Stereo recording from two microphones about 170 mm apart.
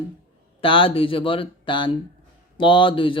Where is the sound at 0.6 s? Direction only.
30° left (ahead or behind).